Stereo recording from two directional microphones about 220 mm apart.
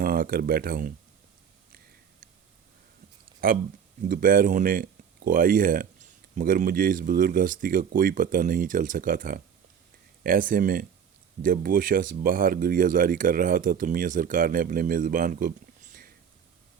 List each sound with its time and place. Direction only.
0.0 s speech: 40° right (ahead or behind)
3.4 s speech: 40° right (ahead or behind)